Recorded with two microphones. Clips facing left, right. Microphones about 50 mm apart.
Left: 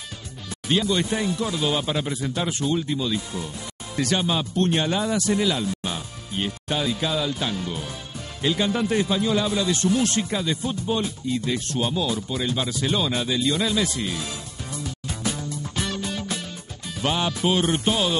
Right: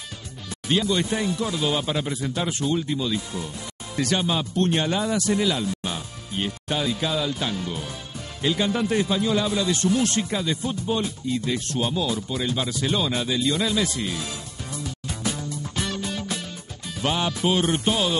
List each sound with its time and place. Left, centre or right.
0.7 s speech: left
15.0 s music: left
17.0 s speech: left